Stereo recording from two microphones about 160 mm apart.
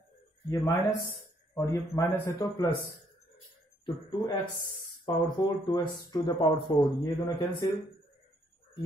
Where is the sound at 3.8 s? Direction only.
30° left (ahead or behind).